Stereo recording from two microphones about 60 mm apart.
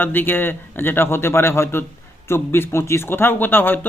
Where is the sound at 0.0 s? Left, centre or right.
Left.